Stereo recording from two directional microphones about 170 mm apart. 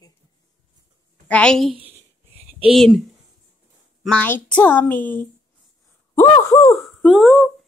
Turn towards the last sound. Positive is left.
turn(degrees=0)  # may be behind; listen again after turning